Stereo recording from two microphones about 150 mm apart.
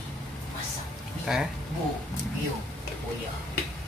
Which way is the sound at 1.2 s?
5° right (ahead or behind).